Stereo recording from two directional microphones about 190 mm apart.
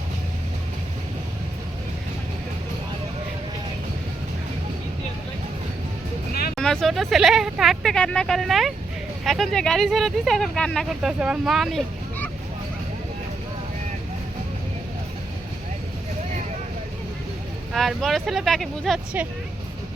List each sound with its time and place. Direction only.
6.6 s speech: 5° left (ahead or behind)
17.7 s speech: centre (ahead or behind)